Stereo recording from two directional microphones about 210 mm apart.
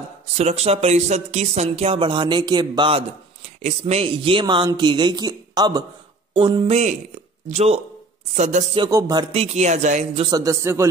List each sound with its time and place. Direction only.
0.4 s speech: 30° right (ahead or behind)
9.3 s speech: 30° right (ahead or behind)
10.2 s a man's voice: 15° right (ahead or behind)